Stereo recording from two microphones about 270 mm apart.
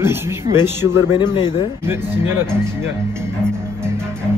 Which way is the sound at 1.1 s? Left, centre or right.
Centre.